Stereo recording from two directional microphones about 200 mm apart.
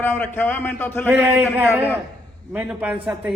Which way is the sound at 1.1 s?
10° right (ahead or behind).